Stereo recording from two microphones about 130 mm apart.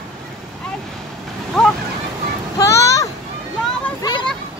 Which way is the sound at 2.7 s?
25° left (ahead or behind).